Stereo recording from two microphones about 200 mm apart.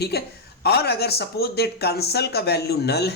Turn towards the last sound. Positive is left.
turn(degrees=55)  # may be behind; listen again after turning